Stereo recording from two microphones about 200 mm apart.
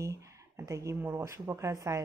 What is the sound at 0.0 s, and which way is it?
Speech, 15° right (ahead or behind).